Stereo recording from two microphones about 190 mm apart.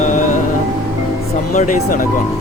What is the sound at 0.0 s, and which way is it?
Music, 40° left (ahead or behind).